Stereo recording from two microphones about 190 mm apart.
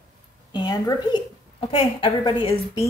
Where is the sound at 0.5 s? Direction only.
20° left (ahead or behind).